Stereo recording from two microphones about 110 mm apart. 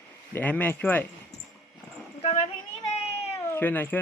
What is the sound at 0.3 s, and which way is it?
Speech, 15° left (ahead or behind).